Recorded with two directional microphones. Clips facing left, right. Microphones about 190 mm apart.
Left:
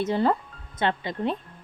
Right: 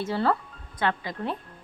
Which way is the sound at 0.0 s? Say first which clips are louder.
Left 2 dB; 20° left (ahead or behind).